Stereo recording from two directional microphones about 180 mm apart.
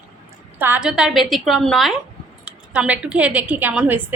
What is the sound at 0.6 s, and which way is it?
A woman's voice, 5° right (ahead or behind).